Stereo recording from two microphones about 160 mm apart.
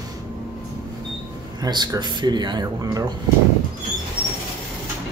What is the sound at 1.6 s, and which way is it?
Speech, 25° right (ahead or behind).